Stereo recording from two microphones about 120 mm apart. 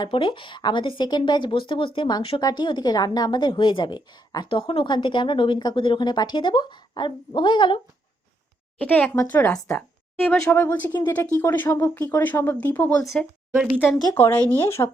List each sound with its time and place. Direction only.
0.0 s a woman's voice: 40° left (ahead or behind)
8.8 s speech: 10° left (ahead or behind)
10.5 s speech: 20° left (ahead or behind)
14.2 s speech: 15° left (ahead or behind)